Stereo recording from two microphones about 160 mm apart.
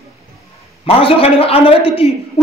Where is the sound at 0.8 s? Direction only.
35° left (ahead or behind).